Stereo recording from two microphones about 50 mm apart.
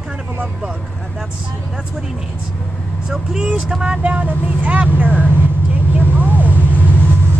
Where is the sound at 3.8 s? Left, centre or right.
Right.